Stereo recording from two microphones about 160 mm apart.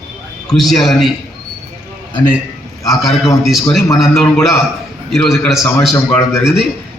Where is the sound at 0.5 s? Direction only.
Centre (ahead or behind).